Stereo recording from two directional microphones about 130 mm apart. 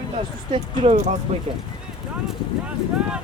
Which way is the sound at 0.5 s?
55° right (ahead or behind).